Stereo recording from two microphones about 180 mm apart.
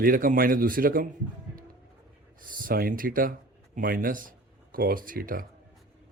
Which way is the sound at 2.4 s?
50° right (ahead or behind).